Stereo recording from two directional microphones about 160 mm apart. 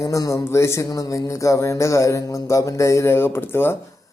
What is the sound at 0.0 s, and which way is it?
Speech, 20° left (ahead or behind).